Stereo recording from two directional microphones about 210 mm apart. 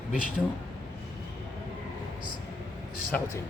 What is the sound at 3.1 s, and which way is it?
Speech, 5° left (ahead or behind).